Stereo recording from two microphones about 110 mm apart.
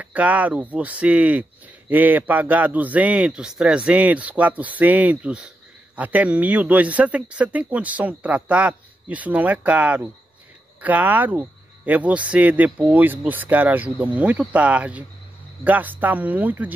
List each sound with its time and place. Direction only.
0.0 s speech: 15° right (ahead or behind)